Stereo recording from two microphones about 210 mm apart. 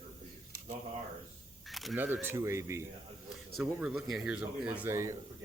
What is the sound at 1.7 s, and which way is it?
Speech, centre (ahead or behind).